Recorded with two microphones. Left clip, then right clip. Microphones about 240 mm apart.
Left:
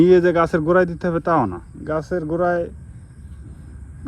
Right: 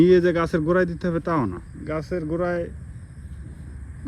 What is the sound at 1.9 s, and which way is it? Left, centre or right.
Speech, left.